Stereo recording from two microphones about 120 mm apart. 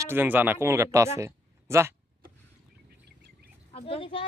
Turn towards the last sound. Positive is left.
turn(degrees=50)  # may be behind; listen again after turning